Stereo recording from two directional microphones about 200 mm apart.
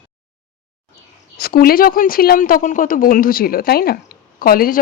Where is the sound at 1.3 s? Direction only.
50° left (ahead or behind).